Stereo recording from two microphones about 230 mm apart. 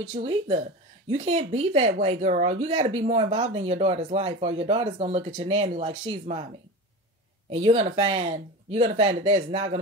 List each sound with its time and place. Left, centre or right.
0.0 s speech: right
7.5 s speech: right